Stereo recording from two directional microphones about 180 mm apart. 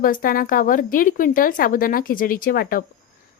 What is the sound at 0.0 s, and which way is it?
A woman's voice, 50° left (ahead or behind).